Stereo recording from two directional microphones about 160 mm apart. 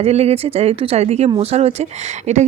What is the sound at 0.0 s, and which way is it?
Speech, 40° right (ahead or behind).